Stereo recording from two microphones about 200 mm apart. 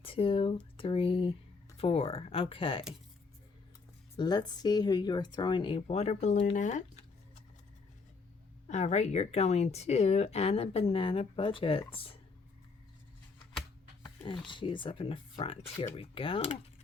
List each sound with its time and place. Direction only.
0.0 s speech: 25° left (ahead or behind)
4.2 s speech: 20° left (ahead or behind); by 7.0 s 40° left (ahead or behind)
8.6 s speech: 35° left (ahead or behind)
14.0 s speech: 25° left (ahead or behind)